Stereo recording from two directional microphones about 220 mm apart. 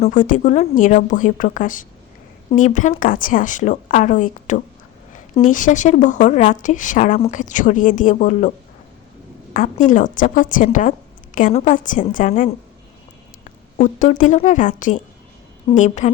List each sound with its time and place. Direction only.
0.0 s a woman's voice: 35° left (ahead or behind)
13.7 s a woman's voice: 35° left (ahead or behind)